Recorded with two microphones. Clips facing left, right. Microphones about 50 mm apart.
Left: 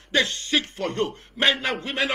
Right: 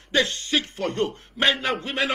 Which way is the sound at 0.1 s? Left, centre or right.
Left.